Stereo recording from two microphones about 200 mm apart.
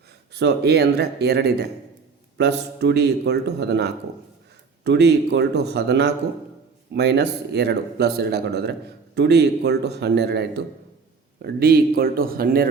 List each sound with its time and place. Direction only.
0.3 s a man's voice: 55° right (ahead or behind)